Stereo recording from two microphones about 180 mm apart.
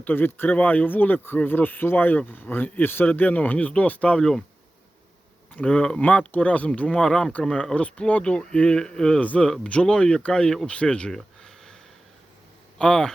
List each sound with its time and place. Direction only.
0.0 s speech: 10° left (ahead or behind)
5.5 s speech: 5° left (ahead or behind)
12.8 s speech: 5° left (ahead or behind)